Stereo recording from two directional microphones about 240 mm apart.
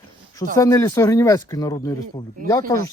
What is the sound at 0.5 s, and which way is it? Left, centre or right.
Speech, centre.